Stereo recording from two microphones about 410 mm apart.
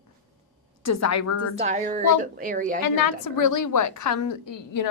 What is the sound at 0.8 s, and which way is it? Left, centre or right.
Speech, left.